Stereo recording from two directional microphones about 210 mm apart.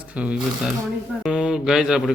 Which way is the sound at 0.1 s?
5° right (ahead or behind).